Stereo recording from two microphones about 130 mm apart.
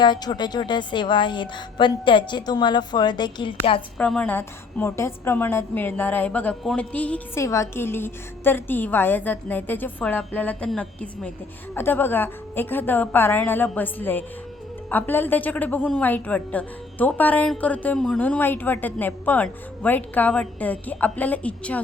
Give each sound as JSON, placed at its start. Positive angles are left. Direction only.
{"t": 0.0, "sound": "a woman's voice", "side_deg": 35}
{"t": 3.9, "sound": "a woman's voice", "side_deg": 5}
{"t": 7.3, "sound": "a woman's voice", "side_deg": 25}